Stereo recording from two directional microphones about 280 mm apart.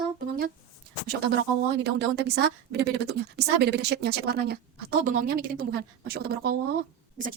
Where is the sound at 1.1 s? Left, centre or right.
Right.